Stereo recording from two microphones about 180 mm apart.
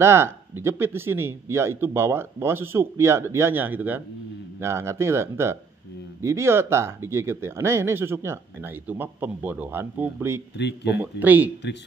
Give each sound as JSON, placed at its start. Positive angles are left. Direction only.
{"t": 0.0, "sound": "speech", "side_deg": -15}
{"t": 10.6, "sound": "speech", "side_deg": 70}
{"t": 11.0, "sound": "speech", "side_deg": -10}